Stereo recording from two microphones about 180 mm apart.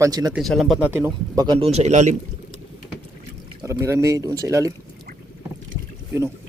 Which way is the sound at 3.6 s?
15° right (ahead or behind).